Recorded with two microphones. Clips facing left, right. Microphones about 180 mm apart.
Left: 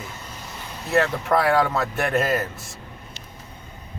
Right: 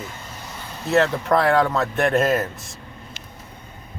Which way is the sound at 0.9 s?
5° left (ahead or behind).